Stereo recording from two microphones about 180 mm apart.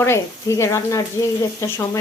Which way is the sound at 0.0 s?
15° left (ahead or behind).